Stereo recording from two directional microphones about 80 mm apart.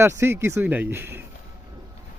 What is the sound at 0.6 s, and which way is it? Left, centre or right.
Speech, right.